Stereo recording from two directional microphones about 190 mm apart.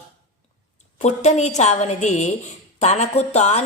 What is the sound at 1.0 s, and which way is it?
A woman's voice, 35° left (ahead or behind).